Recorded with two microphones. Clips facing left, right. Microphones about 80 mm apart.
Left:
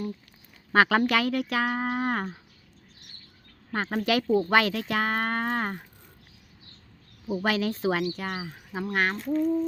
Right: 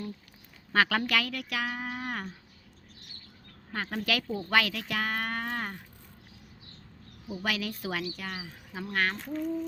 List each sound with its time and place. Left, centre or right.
0.7 s speech: left
3.8 s speech: left
7.3 s speech: left
8.8 s speech: left